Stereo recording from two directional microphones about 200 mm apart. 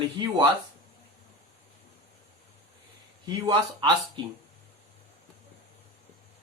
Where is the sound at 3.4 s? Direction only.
20° right (ahead or behind).